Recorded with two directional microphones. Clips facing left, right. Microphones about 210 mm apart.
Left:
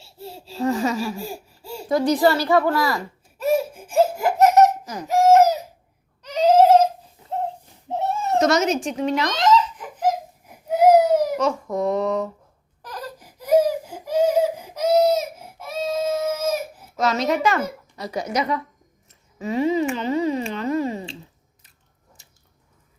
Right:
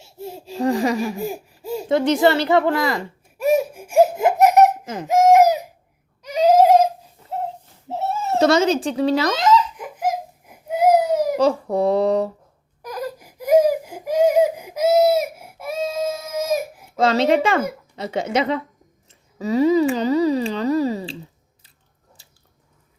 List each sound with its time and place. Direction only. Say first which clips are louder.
0.0 s a sound: right 4 dB; 15° right (ahead or behind)
0.6 s speech: right 2 dB; 35° right (ahead or behind)
0.9 s a sound: right 3 dB; 15° right (ahead or behind)
4.9 s baby cry: right 1 dB; 20° right (ahead or behind)
7.9 s goat: even; 5° right (ahead or behind)
8.4 s speech: right 3 dB; 30° right (ahead or behind)
9.3 s belly laugh: right 1 dB; 10° right (ahead or behind)
11.3 s speech: right 4 dB; 35° right (ahead or behind)
12.8 s baby cry: right 6 dB; 10° right (ahead or behind)
17.0 s speech: right 4 dB; 30° right (ahead or behind)
19.4 s speech: right 5 dB; 40° right (ahead or behind)